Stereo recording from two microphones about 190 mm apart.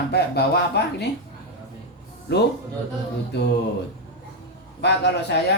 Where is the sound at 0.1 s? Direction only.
60° left (ahead or behind).